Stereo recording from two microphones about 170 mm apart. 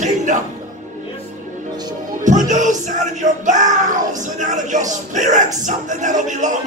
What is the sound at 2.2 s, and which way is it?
Music, 45° right (ahead or behind).